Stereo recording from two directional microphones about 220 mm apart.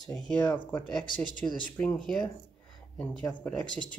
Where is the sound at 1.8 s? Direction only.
5° left (ahead or behind).